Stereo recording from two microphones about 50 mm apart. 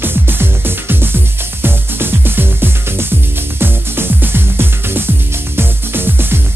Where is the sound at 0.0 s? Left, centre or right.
Right.